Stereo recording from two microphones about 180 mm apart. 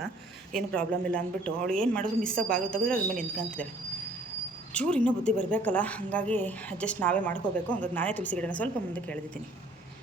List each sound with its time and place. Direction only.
0.5 s speech: 5° left (ahead or behind)
4.7 s a woman's voice: 5° left (ahead or behind)